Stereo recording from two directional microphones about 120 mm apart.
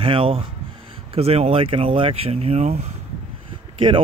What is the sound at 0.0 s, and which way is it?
Speech, 50° right (ahead or behind).